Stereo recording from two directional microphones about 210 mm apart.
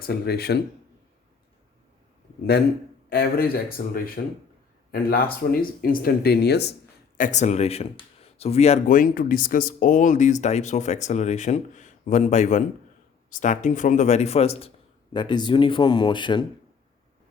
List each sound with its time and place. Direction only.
0.0 s speech: 50° left (ahead or behind)
3.1 s speech: 45° left (ahead or behind)
7.2 s speech: 35° left (ahead or behind)